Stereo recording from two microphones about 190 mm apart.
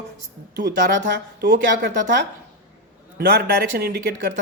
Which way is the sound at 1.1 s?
65° right (ahead or behind).